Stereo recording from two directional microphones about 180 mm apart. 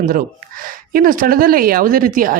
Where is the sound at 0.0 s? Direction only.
50° right (ahead or behind).